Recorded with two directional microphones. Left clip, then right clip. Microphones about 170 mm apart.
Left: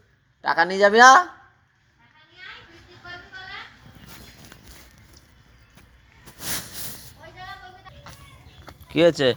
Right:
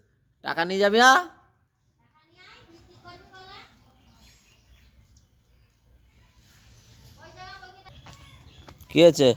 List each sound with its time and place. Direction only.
0.4 s speech: 40° right (ahead or behind)
8.9 s speech: 60° right (ahead or behind)